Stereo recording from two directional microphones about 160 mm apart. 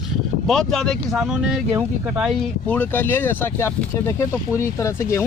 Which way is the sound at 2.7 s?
10° left (ahead or behind).